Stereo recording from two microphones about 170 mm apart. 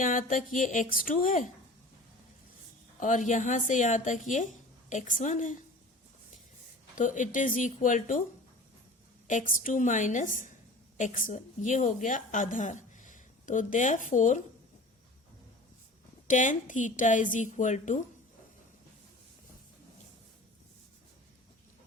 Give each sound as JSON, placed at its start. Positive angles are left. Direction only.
{"t": 0.0, "sound": "a woman's voice", "side_deg": 50}
{"t": 3.0, "sound": "a woman's voice", "side_deg": 50}
{"t": 6.9, "sound": "a woman's voice", "side_deg": 50}
{"t": 9.2, "sound": "a woman's voice", "side_deg": 50}
{"t": 16.2, "sound": "a woman's voice", "side_deg": 50}